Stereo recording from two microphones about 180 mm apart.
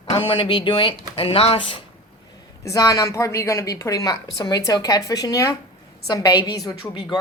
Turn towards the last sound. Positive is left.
turn(degrees=20)  # may be behind; listen again after turning